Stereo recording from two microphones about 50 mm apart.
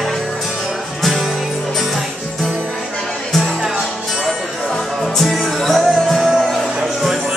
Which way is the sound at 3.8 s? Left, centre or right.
Centre.